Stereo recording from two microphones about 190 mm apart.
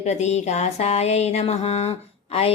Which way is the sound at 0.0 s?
35° left (ahead or behind).